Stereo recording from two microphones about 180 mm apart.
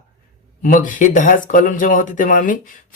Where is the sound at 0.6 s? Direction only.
45° left (ahead or behind).